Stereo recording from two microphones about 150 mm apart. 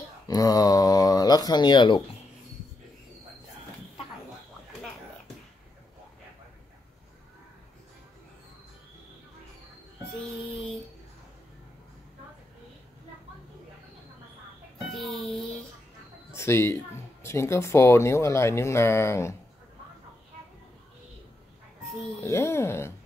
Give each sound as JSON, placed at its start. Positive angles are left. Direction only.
{"t": 0.3, "sound": "speech", "side_deg": 25}
{"t": 14.9, "sound": "music", "side_deg": 0}
{"t": 16.3, "sound": "speech", "side_deg": 15}
{"t": 22.2, "sound": "speech", "side_deg": 20}